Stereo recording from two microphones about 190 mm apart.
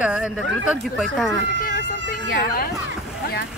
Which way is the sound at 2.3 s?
50° left (ahead or behind).